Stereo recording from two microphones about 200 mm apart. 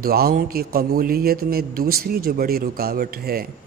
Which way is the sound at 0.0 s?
50° right (ahead or behind).